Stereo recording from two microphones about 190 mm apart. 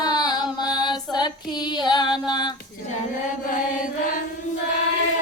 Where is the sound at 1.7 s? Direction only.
20° left (ahead or behind).